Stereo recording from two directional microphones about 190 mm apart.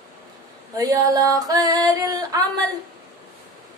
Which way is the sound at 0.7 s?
20° right (ahead or behind).